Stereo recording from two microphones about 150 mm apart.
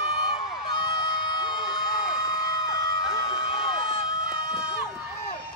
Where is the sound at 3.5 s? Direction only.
35° left (ahead or behind).